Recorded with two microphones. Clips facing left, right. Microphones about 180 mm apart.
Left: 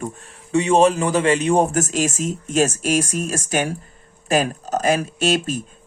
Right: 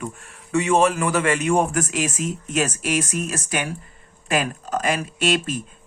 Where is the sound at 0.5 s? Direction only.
30° left (ahead or behind).